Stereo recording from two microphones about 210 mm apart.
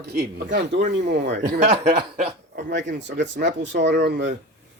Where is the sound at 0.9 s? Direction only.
55° right (ahead or behind).